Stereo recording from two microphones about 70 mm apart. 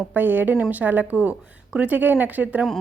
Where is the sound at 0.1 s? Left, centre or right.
Right.